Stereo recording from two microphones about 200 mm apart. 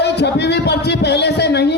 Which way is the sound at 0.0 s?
55° left (ahead or behind).